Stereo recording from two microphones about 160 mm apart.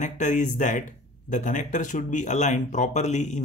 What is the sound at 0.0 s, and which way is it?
Speech, 50° left (ahead or behind).